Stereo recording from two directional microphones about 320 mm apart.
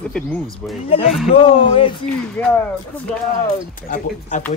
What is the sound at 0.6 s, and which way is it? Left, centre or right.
Speech, centre.